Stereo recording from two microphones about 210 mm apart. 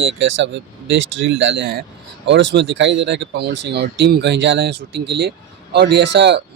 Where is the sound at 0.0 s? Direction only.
65° right (ahead or behind).